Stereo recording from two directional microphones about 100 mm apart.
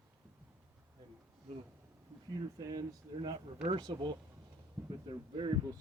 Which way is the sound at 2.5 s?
40° right (ahead or behind).